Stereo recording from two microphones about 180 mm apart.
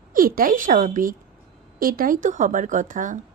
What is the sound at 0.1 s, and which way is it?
A woman's voice, 55° right (ahead or behind).